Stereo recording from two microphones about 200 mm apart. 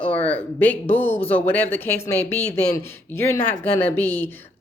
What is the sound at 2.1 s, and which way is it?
Speech, 35° left (ahead or behind).